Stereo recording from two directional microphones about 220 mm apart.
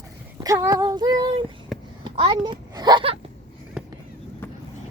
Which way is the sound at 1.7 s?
Centre (ahead or behind).